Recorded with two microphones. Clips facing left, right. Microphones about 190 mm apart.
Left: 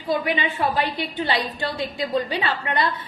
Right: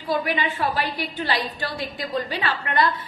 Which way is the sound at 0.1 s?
20° left (ahead or behind).